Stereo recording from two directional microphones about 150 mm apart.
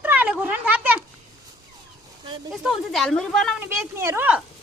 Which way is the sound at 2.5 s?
Centre (ahead or behind).